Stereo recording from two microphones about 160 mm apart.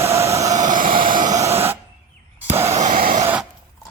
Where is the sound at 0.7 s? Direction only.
60° right (ahead or behind).